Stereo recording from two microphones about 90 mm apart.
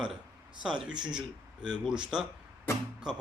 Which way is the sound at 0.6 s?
10° right (ahead or behind).